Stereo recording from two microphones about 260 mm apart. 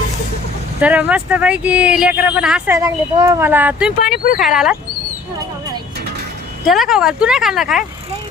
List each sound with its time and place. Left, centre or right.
0.8 s speech: centre
4.0 s speech: left
4.4 s speech: centre
6.7 s speech: centre